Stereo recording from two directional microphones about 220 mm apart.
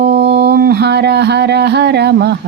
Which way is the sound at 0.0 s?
50° right (ahead or behind).